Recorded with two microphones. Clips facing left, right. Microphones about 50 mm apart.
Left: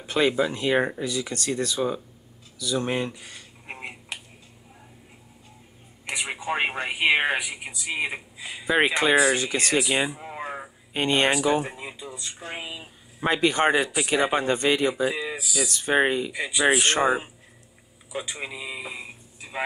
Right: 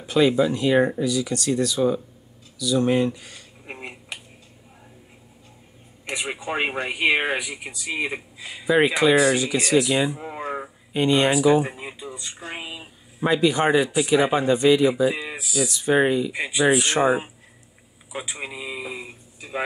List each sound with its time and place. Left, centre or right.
0.0 s speech: left
3.6 s finger snapping: centre
6.0 s speech: centre
8.6 s speech: left
10.1 s a sound: centre
10.9 s speech: left
11.6 s speech: centre
13.2 s speech: left
16.3 s speech: right
16.6 s speech: left
17.0 s speech: centre